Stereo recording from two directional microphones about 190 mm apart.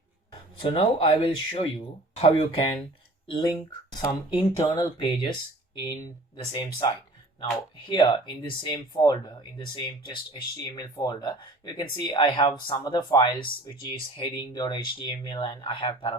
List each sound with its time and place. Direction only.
0.6 s speech: 25° left (ahead or behind)